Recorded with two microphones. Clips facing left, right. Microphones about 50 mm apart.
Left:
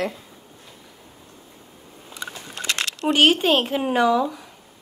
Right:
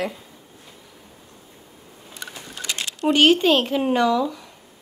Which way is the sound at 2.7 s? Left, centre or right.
Left.